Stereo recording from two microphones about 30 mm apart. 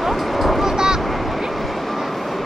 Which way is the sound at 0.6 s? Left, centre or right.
Centre.